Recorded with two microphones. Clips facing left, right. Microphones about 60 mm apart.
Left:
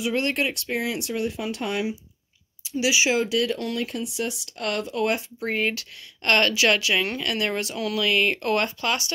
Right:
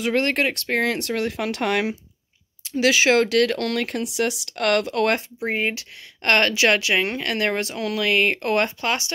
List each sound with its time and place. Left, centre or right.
0.0 s speech: right
2.6 s speech: right
5.4 s speech: right
6.2 s speech: right